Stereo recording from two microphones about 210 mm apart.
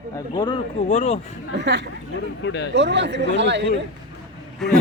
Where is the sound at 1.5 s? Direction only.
55° right (ahead or behind).